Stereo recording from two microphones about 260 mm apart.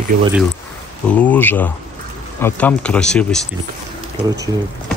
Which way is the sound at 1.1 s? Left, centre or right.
Centre.